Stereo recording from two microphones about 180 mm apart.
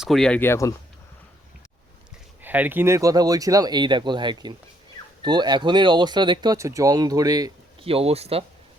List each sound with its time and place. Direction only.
0.0 s speech: centre (ahead or behind)
2.4 s speech: 10° right (ahead or behind)
7.9 s speech: 35° right (ahead or behind)